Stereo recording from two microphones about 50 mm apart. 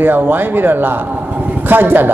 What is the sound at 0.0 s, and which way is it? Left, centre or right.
A man's voice, right.